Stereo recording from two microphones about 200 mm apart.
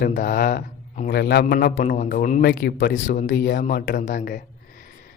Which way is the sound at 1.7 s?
40° left (ahead or behind).